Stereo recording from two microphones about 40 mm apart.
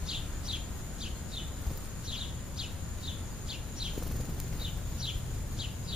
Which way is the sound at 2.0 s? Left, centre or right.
Centre.